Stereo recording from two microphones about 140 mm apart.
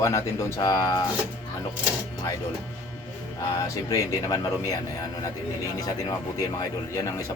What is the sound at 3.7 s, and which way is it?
A man's voice, 25° left (ahead or behind).